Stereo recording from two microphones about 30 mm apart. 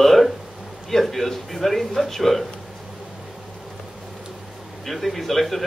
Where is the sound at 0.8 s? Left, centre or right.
Centre.